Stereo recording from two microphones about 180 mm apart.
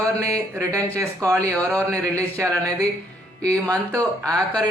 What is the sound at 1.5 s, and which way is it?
Speech, 10° left (ahead or behind).